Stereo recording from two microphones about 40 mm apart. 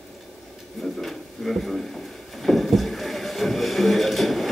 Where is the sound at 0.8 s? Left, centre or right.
Centre.